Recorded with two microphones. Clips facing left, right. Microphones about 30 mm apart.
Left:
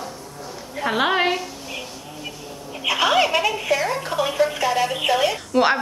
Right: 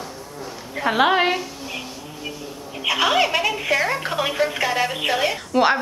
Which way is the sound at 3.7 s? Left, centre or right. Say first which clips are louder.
Right 2 dB; centre.